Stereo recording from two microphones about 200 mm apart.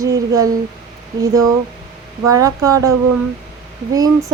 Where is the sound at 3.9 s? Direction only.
15° right (ahead or behind).